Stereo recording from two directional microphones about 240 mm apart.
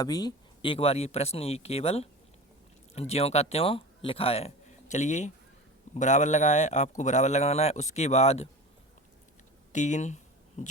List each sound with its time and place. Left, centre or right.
0.0 s a man's voice: centre
9.7 s a man's voice: left